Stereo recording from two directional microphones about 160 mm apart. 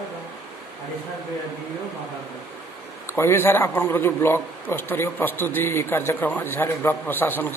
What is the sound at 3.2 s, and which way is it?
A man's voice, 15° left (ahead or behind).